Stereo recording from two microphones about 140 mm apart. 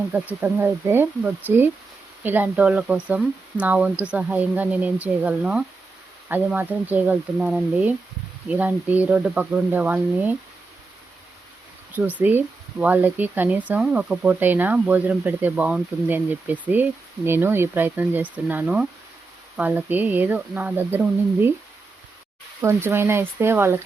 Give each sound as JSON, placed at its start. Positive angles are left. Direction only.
{"t": 0.4, "sound": "speech", "side_deg": -15}
{"t": 11.9, "sound": "speech", "side_deg": -10}
{"t": 22.6, "sound": "speech", "side_deg": -20}